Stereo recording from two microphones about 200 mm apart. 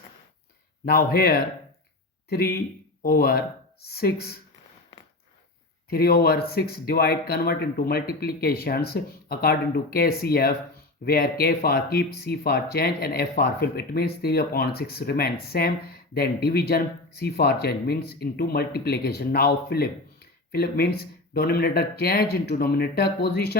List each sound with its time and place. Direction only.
0.9 s speech: 50° left (ahead or behind)
5.9 s speech: 50° left (ahead or behind)